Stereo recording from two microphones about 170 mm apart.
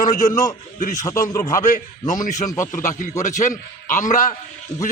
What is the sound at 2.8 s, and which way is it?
A man's voice, 50° left (ahead or behind).